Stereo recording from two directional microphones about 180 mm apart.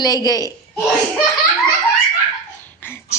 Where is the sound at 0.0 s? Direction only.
20° left (ahead or behind).